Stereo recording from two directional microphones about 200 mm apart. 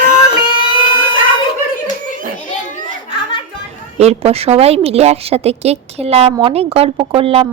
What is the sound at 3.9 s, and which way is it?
A woman's voice, 30° right (ahead or behind).